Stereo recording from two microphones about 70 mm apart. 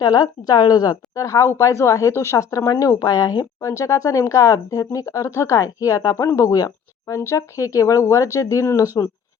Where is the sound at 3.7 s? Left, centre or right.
Left.